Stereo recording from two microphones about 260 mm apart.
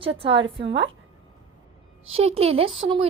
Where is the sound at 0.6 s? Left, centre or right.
Right.